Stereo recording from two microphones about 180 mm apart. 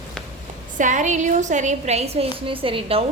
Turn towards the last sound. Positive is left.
turn(degrees=-30)  # may be behind; listen again after turning